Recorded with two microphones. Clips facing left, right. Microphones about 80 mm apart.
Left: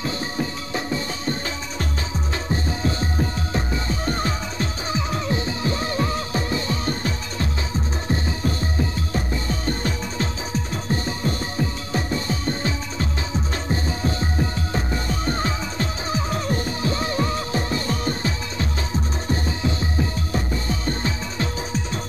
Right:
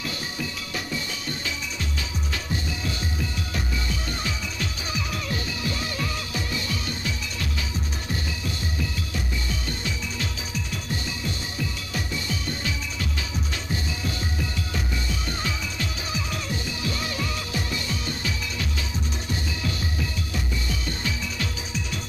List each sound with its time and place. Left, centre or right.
0.0 s music: left
2.5 s music: left